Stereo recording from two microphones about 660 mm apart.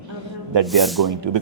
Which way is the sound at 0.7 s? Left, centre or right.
Centre.